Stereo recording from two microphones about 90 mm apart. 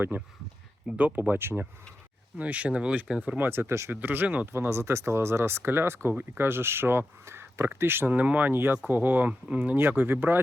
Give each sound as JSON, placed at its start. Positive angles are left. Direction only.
{"t": 0.1, "sound": "speech", "side_deg": -20}
{"t": 2.4, "sound": "speech", "side_deg": -15}
{"t": 4.5, "sound": "speech", "side_deg": -30}